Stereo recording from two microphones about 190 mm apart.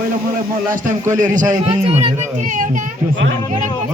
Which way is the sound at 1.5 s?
30° right (ahead or behind).